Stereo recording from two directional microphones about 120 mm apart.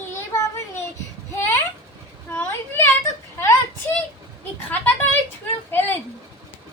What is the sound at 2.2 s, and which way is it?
Speech, 15° left (ahead or behind).